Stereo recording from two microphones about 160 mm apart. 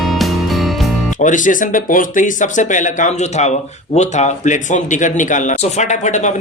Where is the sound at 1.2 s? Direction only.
55° left (ahead or behind).